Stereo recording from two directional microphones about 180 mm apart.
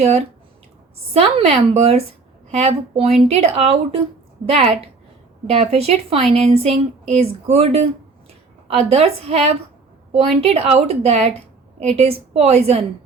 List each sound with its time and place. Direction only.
0.0 s a woman's voice: 35° right (ahead or behind)
5.5 s a woman's voice: 35° right (ahead or behind)